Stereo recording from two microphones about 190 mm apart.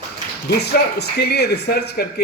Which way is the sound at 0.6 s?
60° left (ahead or behind).